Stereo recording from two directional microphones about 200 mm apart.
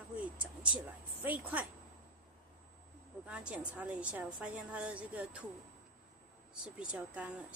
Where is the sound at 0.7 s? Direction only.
10° right (ahead or behind).